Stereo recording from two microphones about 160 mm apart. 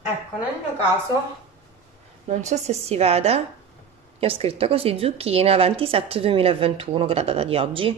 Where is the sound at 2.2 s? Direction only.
45° right (ahead or behind).